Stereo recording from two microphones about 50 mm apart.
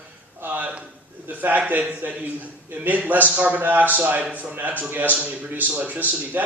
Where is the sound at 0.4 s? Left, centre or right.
Right.